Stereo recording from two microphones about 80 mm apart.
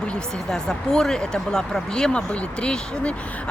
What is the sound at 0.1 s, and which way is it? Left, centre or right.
Speech, centre.